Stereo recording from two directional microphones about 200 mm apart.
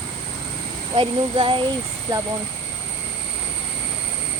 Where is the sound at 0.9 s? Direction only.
25° right (ahead or behind).